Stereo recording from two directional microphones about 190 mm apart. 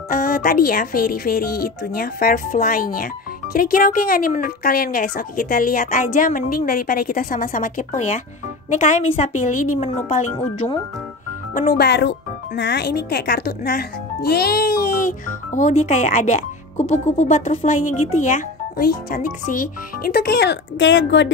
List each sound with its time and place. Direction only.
0.1 s speech: 50° left (ahead or behind)
11.5 s speech: 50° left (ahead or behind); by 21.3 s 70° left (ahead or behind)